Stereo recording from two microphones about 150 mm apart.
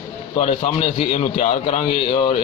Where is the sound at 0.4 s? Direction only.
45° left (ahead or behind).